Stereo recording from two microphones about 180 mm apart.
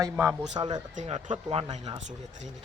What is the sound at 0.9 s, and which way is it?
Speech, 35° right (ahead or behind).